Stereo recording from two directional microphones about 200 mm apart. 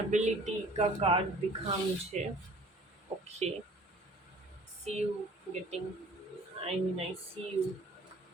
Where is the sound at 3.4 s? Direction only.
30° right (ahead or behind).